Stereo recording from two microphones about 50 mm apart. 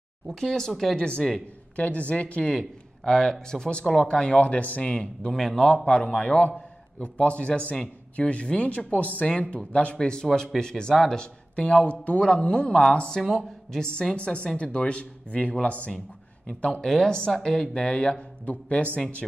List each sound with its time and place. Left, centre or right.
0.3 s speech: centre
1.8 s speech: left
3.1 s speech: centre
5.3 s speech: centre
6.1 s speech: left
11.5 s speech: left
16.8 s speech: centre; by 18.9 s left